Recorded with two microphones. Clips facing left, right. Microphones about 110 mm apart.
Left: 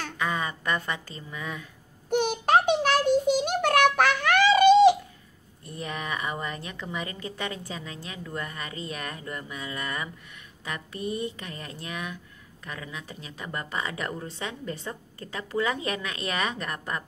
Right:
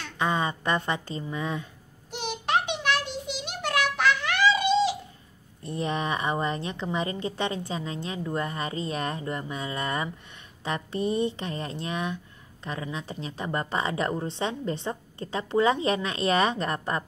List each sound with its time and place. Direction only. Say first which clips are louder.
0.2 s a woman's voice: right 4 dB; 25° right (ahead or behind)
2.0 s a sound: left 7 dB; 50° left (ahead or behind)
5.6 s a woman's voice: right 6 dB; 25° right (ahead or behind)